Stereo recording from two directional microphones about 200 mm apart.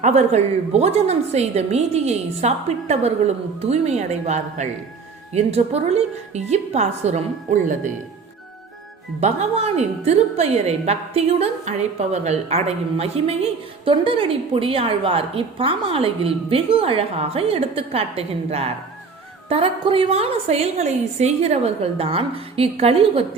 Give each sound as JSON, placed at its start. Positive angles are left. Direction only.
{"t": 0.0, "sound": "a woman's voice", "side_deg": -35}
{"t": 9.2, "sound": "a woman's voice", "side_deg": -35}